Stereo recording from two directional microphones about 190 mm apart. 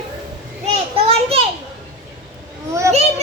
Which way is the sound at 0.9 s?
30° right (ahead or behind).